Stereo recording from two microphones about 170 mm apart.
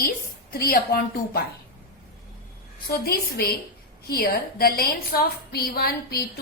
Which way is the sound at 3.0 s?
65° left (ahead or behind).